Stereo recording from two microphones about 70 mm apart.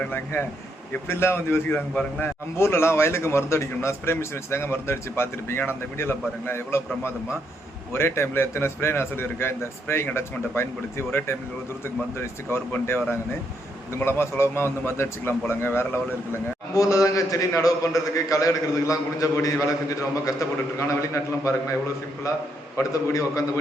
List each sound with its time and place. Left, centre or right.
0.0 s a man's voice: left
1.0 s a man's voice: left
1.7 s a man's voice: left
2.6 s a man's voice: left
16.7 s a man's voice: left